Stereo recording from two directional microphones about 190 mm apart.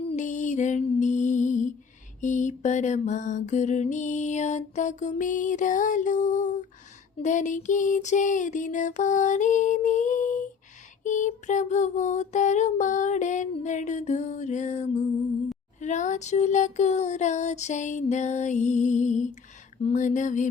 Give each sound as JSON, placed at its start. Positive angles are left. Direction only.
{"t": 0.2, "sound": "music", "side_deg": 40}
{"t": 2.2, "sound": "mantra", "side_deg": 40}